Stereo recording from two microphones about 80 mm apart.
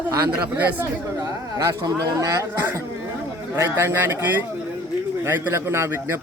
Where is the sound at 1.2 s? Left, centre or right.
Right.